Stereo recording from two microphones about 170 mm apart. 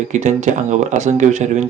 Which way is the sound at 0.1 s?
45° right (ahead or behind).